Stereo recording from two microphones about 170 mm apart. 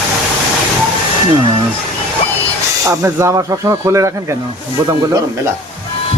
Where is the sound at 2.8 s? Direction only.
20° right (ahead or behind).